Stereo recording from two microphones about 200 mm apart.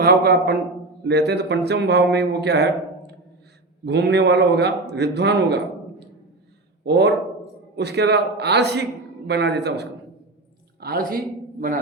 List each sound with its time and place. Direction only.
0.0 s a man's voice: 50° right (ahead or behind)
3.8 s a man's voice: 60° right (ahead or behind)